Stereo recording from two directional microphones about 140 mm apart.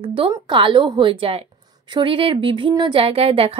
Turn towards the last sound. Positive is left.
turn(degrees=-45)  # may be behind; listen again after turning